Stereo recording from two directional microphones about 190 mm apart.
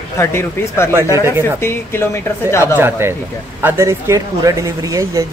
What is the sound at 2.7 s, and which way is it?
Speech, 10° right (ahead or behind).